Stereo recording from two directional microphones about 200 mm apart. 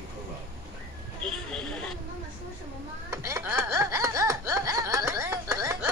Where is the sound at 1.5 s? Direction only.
5° left (ahead or behind).